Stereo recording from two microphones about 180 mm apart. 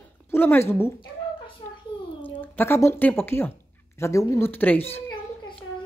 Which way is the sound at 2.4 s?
10° left (ahead or behind).